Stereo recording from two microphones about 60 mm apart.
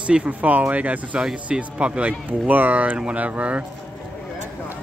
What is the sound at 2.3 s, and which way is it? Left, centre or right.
Speech, right.